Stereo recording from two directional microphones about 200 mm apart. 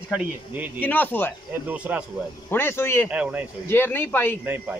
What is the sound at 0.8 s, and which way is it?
Speech, 10° left (ahead or behind).